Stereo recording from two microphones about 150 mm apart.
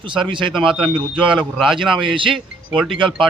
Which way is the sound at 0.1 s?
35° right (ahead or behind).